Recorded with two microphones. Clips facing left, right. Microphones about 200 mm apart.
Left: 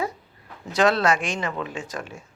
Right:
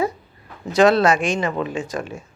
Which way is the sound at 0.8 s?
20° right (ahead or behind).